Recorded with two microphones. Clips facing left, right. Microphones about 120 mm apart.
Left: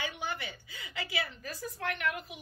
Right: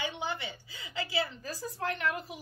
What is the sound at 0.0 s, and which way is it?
A woman's voice, 25° right (ahead or behind).